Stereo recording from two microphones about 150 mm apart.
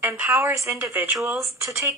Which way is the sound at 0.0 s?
15° right (ahead or behind).